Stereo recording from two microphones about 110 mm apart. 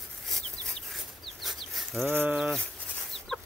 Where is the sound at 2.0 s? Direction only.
20° right (ahead or behind).